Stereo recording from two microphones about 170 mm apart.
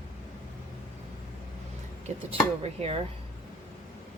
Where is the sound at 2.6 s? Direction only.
35° right (ahead or behind).